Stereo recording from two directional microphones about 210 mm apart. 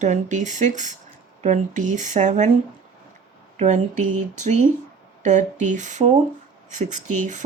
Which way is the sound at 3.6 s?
35° right (ahead or behind).